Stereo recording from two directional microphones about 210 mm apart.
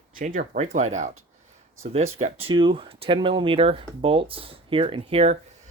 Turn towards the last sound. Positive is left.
turn(degrees=-30)  # may be behind; listen again after turning